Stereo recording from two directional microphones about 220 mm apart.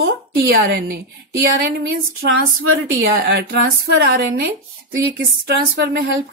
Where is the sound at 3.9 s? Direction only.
50° right (ahead or behind).